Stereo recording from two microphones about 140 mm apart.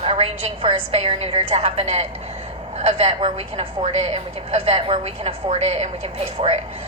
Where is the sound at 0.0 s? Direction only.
45° right (ahead or behind).